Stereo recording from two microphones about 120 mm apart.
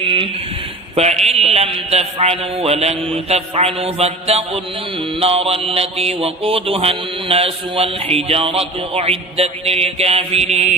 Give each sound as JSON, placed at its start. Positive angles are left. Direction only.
{"t": 0.9, "sound": "mantra", "side_deg": -65}